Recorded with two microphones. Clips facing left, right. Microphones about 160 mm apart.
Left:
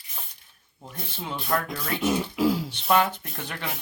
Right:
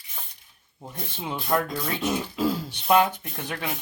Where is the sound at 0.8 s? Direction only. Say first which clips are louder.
Right 1 dB; 15° right (ahead or behind).